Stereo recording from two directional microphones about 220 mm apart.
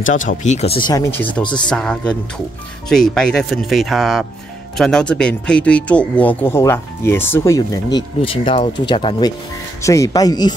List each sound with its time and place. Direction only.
0.0 s speech: 35° left (ahead or behind); by 1.0 s 20° left (ahead or behind)
1.1 s speech: 5° left (ahead or behind)